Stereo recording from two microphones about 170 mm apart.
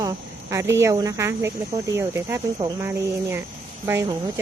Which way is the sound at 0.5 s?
15° right (ahead or behind).